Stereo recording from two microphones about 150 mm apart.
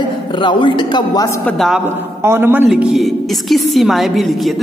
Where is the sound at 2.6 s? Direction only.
5° right (ahead or behind).